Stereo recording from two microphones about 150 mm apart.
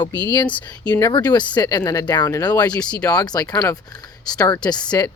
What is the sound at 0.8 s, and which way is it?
Speech, 10° left (ahead or behind).